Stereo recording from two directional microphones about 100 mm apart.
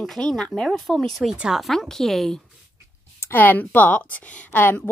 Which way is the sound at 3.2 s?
20° left (ahead or behind).